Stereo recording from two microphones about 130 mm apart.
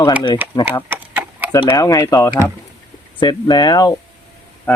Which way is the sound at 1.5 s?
35° left (ahead or behind).